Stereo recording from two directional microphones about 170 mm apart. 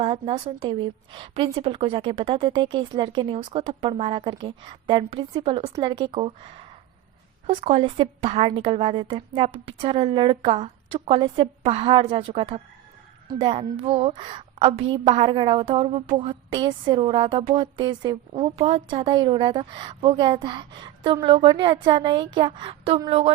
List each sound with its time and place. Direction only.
0.0 s a woman's voice: 30° right (ahead or behind)